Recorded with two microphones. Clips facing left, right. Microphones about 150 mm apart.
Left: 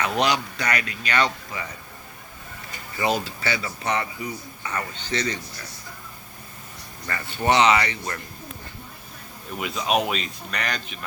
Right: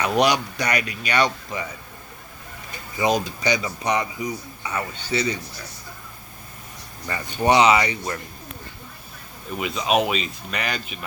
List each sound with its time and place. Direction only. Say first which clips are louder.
0.0 s a man's voice: right 3 dB; 15° right (ahead or behind)
3.0 s a man's voice: right 3 dB; 15° right (ahead or behind)
7.1 s a man's voice: right 3 dB; 15° right (ahead or behind)
9.5 s speech: right 2 dB; centre (ahead or behind)